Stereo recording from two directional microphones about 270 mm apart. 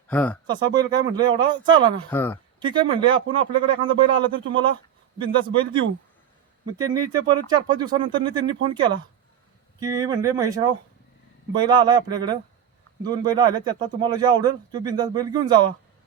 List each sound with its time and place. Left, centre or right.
0.1 s speech: centre
0.4 s a man's voice: centre
2.0 s speech: centre
2.6 s a man's voice: centre